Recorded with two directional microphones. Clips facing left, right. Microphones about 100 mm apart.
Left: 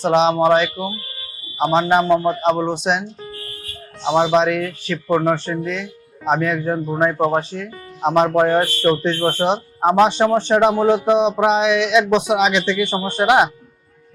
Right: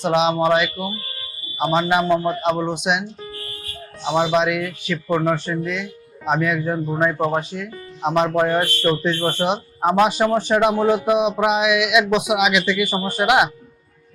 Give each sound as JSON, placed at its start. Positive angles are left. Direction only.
{"t": 0.1, "sound": "speech", "side_deg": 35}
{"t": 4.0, "sound": "speech", "side_deg": 25}
{"t": 6.7, "sound": "speech", "side_deg": 15}
{"t": 7.3, "sound": "speech", "side_deg": 35}